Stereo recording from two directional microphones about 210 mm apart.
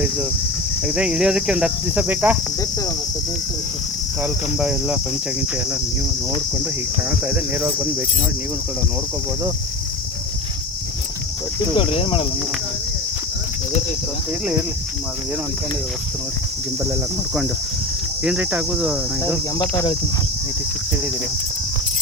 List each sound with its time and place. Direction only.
0.9 s cricket: 5° right (ahead or behind)
4.2 s cricket: 5° right (ahead or behind)
7.3 s cricket: 10° right (ahead or behind)
11.8 s speech: 25° left (ahead or behind)
18.2 s cricket: 5° right (ahead or behind)
19.6 s speech: 15° left (ahead or behind)